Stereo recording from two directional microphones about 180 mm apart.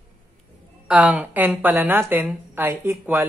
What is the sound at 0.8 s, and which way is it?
Speech, 10° right (ahead or behind).